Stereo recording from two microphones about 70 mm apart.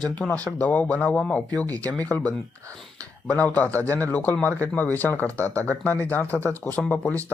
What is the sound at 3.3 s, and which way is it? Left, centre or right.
Speech, left.